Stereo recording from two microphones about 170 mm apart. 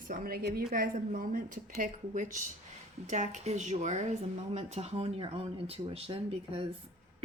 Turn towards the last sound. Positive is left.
turn(degrees=-35)  # may be behind; listen again after turning